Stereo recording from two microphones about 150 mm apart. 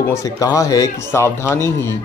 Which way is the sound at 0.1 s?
20° left (ahead or behind).